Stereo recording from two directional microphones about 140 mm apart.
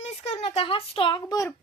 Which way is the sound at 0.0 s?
50° left (ahead or behind).